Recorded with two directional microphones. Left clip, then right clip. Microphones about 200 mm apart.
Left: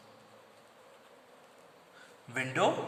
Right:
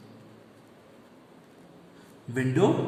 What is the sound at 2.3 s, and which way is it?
Speech, 35° left (ahead or behind).